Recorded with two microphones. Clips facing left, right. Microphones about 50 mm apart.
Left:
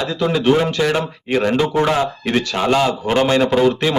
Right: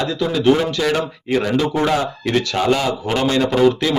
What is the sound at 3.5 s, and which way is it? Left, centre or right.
Speech, left.